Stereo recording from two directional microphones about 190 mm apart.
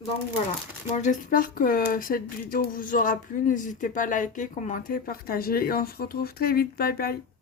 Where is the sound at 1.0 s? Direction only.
45° left (ahead or behind).